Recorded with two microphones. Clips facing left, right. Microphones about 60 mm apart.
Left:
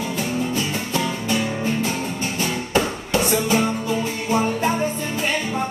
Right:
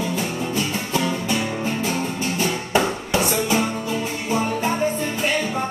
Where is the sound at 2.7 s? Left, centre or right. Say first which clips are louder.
Even; centre.